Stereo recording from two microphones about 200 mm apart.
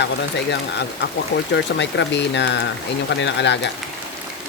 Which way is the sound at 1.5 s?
60° left (ahead or behind).